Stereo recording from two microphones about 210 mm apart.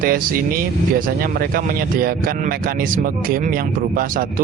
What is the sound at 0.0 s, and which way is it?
Speech, 45° right (ahead or behind).